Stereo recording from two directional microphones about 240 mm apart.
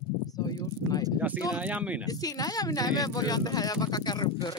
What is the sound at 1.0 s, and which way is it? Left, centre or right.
Speech, centre.